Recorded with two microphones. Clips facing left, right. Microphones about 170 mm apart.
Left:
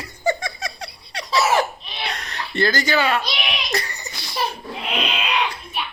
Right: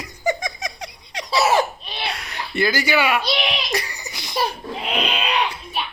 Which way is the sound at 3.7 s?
15° right (ahead or behind).